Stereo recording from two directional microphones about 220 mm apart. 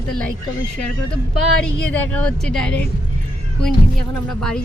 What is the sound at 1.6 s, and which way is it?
A woman's voice, 5° left (ahead or behind).